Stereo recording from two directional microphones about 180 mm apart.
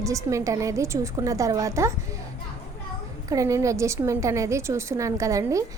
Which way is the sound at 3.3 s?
15° right (ahead or behind).